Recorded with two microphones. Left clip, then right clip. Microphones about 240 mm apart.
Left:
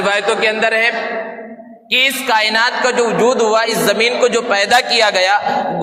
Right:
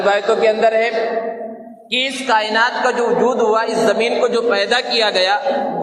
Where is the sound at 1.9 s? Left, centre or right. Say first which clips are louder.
Left 3 dB; left.